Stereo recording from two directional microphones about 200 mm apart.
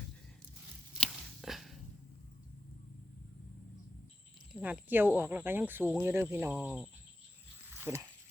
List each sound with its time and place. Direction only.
0.9 s a sound: centre (ahead or behind)
4.6 s speech: 10° right (ahead or behind)
7.7 s dog: 10° right (ahead or behind)